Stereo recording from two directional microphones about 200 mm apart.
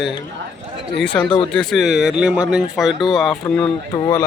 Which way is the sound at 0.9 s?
60° left (ahead or behind).